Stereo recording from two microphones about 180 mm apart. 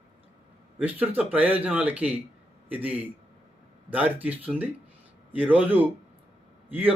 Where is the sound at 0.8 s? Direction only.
10° right (ahead or behind).